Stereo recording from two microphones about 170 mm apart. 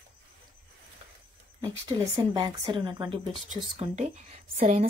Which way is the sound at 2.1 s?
25° right (ahead or behind).